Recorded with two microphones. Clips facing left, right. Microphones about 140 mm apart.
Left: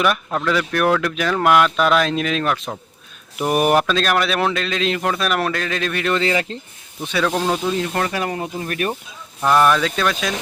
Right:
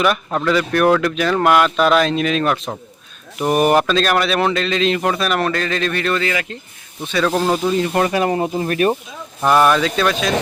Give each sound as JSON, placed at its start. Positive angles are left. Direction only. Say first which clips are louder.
{"t": 0.0, "sound": "speech", "louder": "right 2 dB", "side_deg": 0}
{"t": 6.1, "sound": "speech", "louder": "left 1 dB", "side_deg": 25}
{"t": 7.0, "sound": "speech", "louder": "right 2 dB", "side_deg": 10}
{"t": 7.3, "sound": "speech", "louder": "right 4 dB", "side_deg": -5}
{"t": 7.9, "sound": "speech", "louder": "right 6 dB", "side_deg": -20}
{"t": 9.4, "sound": "speech", "louder": "right 2 dB", "side_deg": -5}